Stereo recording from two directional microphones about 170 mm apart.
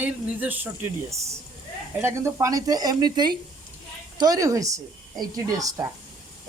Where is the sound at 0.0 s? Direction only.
10° right (ahead or behind).